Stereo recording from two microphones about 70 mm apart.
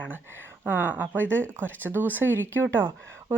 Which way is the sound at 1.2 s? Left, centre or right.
Centre.